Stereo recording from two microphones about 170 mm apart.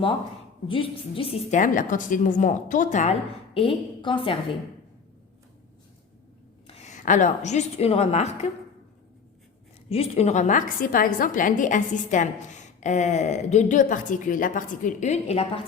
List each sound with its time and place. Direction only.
0.7 s a woman's voice: 30° left (ahead or behind)
1.5 s a woman's voice: 50° left (ahead or behind); by 4.4 s 30° left (ahead or behind)
6.7 s a woman's voice: 40° left (ahead or behind)
9.9 s a woman's voice: 35° left (ahead or behind)